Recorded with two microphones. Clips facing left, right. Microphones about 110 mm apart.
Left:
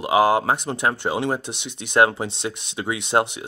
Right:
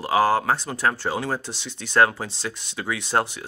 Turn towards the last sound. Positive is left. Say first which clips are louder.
# left 3 dB
turn(degrees=20)  # may be behind; listen again after turning